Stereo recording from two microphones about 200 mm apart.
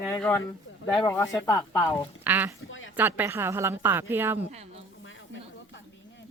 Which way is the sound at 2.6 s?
75° left (ahead or behind).